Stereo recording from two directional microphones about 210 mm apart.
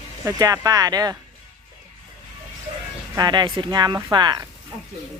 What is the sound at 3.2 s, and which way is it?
Speech, 20° right (ahead or behind).